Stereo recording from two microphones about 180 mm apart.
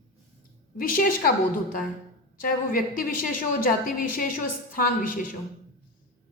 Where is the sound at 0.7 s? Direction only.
50° left (ahead or behind).